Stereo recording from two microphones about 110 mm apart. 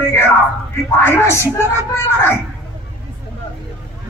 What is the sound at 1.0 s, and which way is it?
Speech, 25° left (ahead or behind).